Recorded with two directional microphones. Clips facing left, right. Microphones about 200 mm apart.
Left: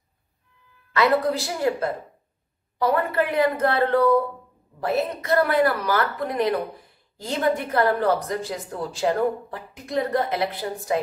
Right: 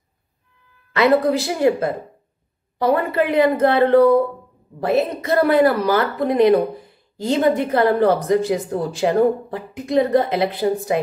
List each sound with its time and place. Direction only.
0.9 s speech: 25° right (ahead or behind)